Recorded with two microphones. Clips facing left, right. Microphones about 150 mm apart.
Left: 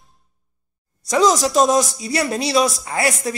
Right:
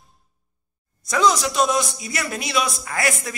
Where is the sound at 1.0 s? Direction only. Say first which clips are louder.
Left 3 dB; 35° left (ahead or behind).